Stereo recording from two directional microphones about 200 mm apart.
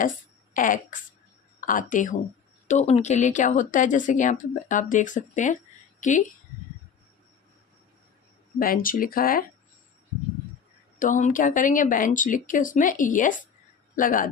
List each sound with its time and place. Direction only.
0.5 s fart: 40° left (ahead or behind)
1.6 s speech: 40° left (ahead or behind)
8.5 s speech: 45° left (ahead or behind)
11.0 s a man's voice: 40° left (ahead or behind)